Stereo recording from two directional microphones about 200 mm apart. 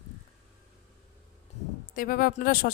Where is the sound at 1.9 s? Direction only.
45° left (ahead or behind).